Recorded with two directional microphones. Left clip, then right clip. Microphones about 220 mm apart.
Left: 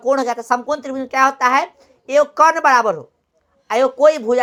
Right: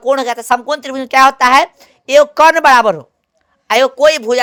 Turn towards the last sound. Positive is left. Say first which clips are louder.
# right 3 dB
turn(degrees=-45)  # may be behind; listen again after turning